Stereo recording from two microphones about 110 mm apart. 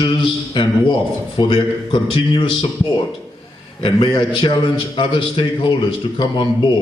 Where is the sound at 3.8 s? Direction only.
45° left (ahead or behind).